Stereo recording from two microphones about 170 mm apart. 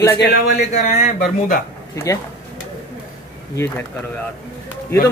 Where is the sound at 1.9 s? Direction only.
20° left (ahead or behind).